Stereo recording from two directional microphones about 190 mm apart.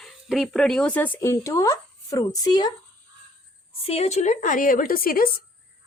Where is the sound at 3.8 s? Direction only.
35° left (ahead or behind).